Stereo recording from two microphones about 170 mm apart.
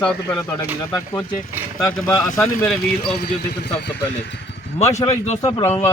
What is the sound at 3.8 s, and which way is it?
Speech, 80° left.